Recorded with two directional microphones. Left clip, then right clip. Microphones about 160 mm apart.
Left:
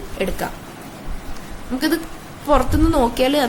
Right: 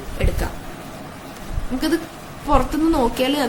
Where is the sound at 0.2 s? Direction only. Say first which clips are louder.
Left 3 dB; 30° left (ahead or behind).